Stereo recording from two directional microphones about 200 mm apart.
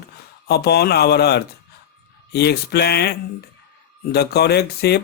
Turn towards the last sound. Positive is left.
turn(degrees=55)  # may be behind; listen again after turning